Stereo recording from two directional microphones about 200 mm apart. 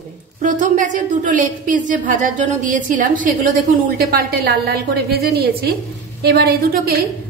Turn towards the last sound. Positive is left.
turn(degrees=-50)  # may be behind; listen again after turning